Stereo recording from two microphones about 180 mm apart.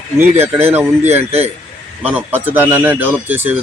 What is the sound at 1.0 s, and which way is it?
Speech, 35° right (ahead or behind).